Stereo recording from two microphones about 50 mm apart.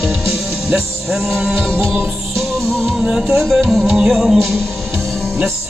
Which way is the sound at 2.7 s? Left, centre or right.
Centre.